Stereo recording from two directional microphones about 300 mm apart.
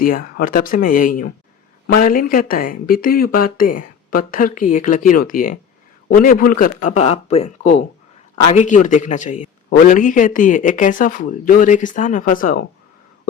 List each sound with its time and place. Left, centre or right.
0.0 s a man's voice: left